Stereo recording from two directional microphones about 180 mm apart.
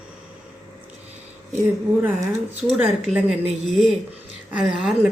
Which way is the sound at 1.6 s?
10° right (ahead or behind).